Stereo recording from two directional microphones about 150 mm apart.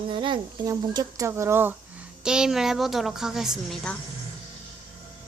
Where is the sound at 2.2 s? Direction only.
5° right (ahead or behind).